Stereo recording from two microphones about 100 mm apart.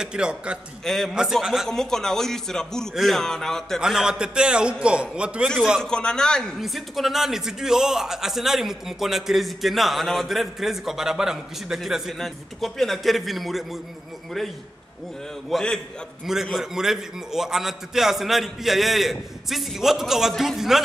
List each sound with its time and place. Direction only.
0.0 s a man's voice: 10° right (ahead or behind)
0.8 s a man's voice: 5° left (ahead or behind)
3.8 s a man's voice: 5° right (ahead or behind)
5.8 s a man's voice: 10° left (ahead or behind)
15.5 s a man's voice: 10° left (ahead or behind)
16.5 s a man's voice: 5° right (ahead or behind)